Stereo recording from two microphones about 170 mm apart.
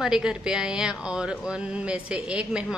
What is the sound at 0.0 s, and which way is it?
A woman's voice, 5° right (ahead or behind).